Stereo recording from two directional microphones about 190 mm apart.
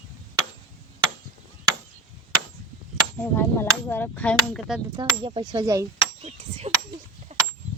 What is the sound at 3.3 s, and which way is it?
Speech, 10° left (ahead or behind).